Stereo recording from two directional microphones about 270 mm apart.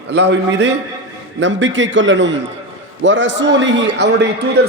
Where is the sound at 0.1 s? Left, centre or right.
Right.